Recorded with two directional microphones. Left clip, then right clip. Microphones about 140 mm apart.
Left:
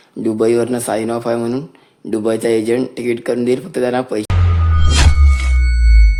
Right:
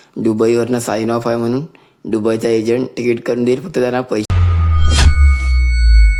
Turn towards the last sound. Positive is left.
turn(degrees=0)  # may be behind; listen again after turning